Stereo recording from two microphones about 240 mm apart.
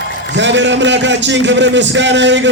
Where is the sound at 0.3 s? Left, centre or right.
Right.